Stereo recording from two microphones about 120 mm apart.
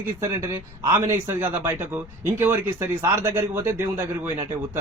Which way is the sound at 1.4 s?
15° right (ahead or behind).